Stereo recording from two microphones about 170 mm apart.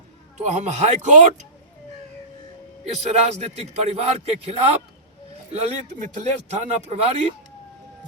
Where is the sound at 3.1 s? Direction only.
40° right (ahead or behind).